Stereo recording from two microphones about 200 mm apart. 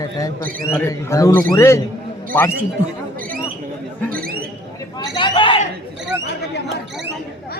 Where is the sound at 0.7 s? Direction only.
15° left (ahead or behind).